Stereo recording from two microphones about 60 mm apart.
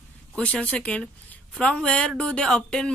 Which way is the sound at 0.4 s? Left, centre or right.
Left.